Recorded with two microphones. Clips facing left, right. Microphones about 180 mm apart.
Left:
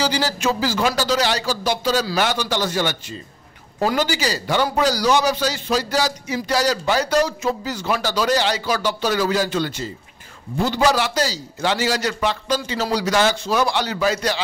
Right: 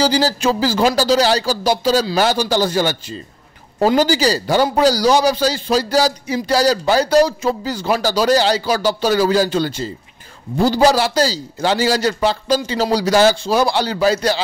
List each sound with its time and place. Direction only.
0.0 s speech: 35° right (ahead or behind)